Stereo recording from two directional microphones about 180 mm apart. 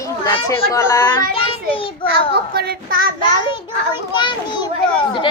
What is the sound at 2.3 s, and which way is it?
Child singing, 60° right (ahead or behind).